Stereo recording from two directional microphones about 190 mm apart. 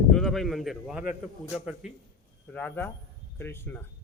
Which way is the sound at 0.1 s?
Centre (ahead or behind).